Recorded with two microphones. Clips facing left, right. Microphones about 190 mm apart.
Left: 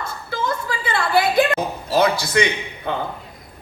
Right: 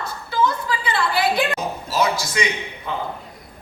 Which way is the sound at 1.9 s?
60° left (ahead or behind).